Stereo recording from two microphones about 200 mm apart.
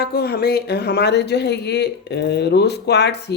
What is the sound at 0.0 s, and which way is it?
Speech, 50° left (ahead or behind).